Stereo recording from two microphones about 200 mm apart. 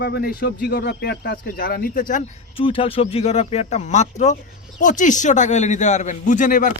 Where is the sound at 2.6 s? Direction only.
25° left (ahead or behind).